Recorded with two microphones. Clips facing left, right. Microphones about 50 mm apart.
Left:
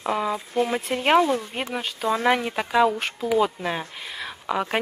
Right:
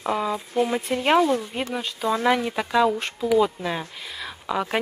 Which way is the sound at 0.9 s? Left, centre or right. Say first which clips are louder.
Even; centre.